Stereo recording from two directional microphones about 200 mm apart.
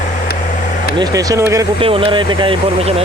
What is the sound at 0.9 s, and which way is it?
Speech, 15° right (ahead or behind).